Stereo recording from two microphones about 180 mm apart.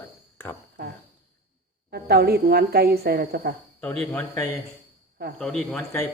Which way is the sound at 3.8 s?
10° left (ahead or behind).